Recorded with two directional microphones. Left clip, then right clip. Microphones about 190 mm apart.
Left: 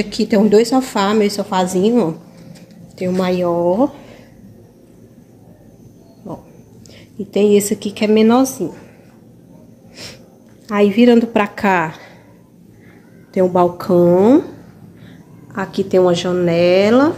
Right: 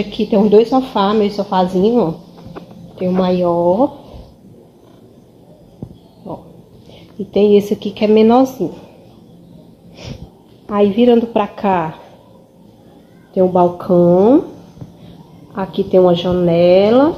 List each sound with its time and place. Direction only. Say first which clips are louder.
0.1 s a woman's voice: right 2 dB; 10° left (ahead or behind)
7.2 s a woman's voice: right 2 dB; 5° left (ahead or behind)
10.7 s a woman's voice: even; 15° left (ahead or behind)
13.3 s a woman's voice: right 1 dB; 25° left (ahead or behind)
15.5 s a woman's voice: right 2 dB; 10° left (ahead or behind)